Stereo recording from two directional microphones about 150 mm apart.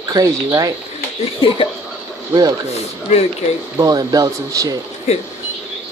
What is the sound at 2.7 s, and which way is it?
Speech, 45° left (ahead or behind).